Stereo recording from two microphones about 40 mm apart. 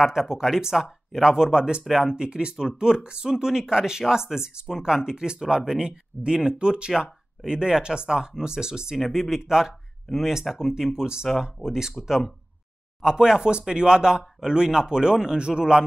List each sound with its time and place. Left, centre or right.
0.0 s speech: centre
8.9 s speech: centre